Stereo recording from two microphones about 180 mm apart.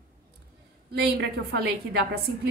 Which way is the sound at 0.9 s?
70° right (ahead or behind).